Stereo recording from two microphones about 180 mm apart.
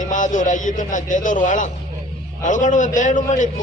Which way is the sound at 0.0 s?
45° left (ahead or behind).